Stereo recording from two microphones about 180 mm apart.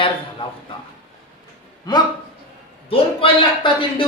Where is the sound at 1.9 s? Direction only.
20° left (ahead or behind).